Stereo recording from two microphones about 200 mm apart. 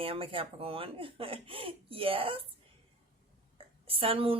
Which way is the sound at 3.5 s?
30° right (ahead or behind).